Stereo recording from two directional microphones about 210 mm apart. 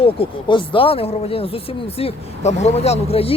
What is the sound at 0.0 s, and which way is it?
Speech, 25° left (ahead or behind).